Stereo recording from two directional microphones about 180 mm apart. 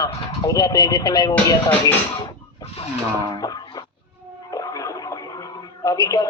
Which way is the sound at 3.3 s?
20° left (ahead or behind).